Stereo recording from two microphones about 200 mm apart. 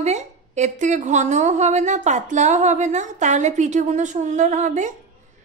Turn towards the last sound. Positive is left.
turn(degrees=-40)  # may be behind; listen again after turning